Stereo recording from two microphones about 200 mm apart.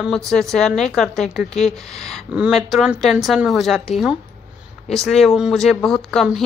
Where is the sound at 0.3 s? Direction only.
Centre (ahead or behind).